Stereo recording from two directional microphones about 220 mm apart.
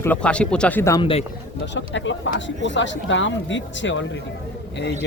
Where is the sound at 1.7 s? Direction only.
55° left (ahead or behind).